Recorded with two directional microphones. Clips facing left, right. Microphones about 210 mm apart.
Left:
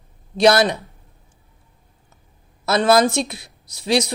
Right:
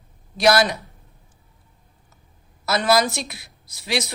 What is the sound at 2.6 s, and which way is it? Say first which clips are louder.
A woman's voice: left 4 dB; 25° left (ahead or behind).